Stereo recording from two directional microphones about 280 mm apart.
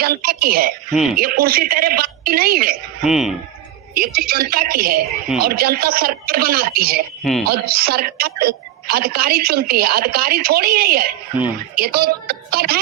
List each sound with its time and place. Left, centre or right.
0.0 s a woman's voice: right
3.0 s speech: centre
3.9 s a woman's voice: right